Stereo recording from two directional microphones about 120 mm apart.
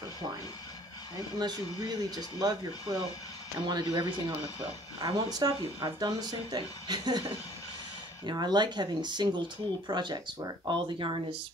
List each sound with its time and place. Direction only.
1.1 s speech: 35° right (ahead or behind)